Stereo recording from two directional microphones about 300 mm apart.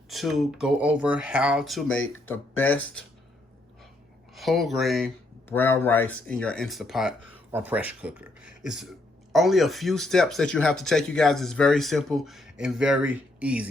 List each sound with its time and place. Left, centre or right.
0.1 s speech: centre
4.4 s speech: centre